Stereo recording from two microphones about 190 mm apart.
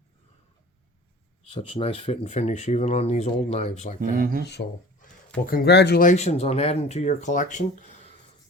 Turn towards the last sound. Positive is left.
turn(degrees=40)  # may be behind; listen again after turning